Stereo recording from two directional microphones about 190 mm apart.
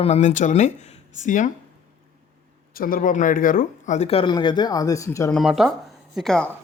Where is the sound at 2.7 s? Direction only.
50° left (ahead or behind); by 5.3 s 15° left (ahead or behind).